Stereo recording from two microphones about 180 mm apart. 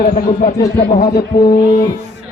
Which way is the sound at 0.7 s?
55° left (ahead or behind).